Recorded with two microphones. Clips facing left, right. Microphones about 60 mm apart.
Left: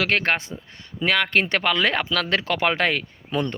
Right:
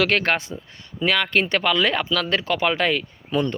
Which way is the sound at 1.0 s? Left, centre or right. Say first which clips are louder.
Even; left.